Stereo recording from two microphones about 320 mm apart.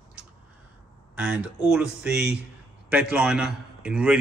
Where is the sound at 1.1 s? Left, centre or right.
Centre.